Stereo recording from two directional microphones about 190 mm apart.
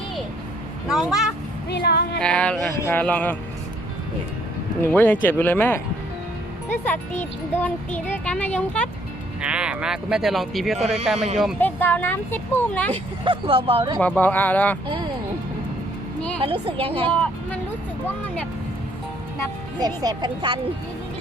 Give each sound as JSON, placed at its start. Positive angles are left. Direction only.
{"t": 0.9, "sound": "speech", "side_deg": 0}
{"t": 1.7, "sound": "music", "side_deg": 60}
{"t": 2.1, "sound": "speech", "side_deg": 5}
{"t": 4.8, "sound": "speech", "side_deg": 10}
{"t": 9.4, "sound": "speech", "side_deg": -5}
{"t": 11.6, "sound": "speech", "side_deg": 10}
{"t": 12.9, "sound": "speech", "side_deg": -30}
{"t": 14.0, "sound": "speech", "side_deg": 10}
{"t": 16.4, "sound": "speech", "side_deg": -30}
{"t": 17.1, "sound": "speech", "side_deg": 5}
{"t": 19.8, "sound": "speech", "side_deg": -20}